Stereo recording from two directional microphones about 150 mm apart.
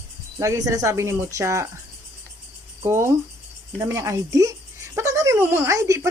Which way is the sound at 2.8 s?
15° right (ahead or behind).